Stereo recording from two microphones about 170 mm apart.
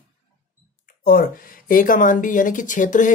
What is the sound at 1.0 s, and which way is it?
Speech, 60° left (ahead or behind).